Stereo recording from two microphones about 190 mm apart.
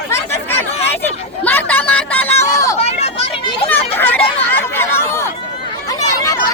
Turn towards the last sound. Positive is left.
turn(degrees=15)  # may be behind; listen again after turning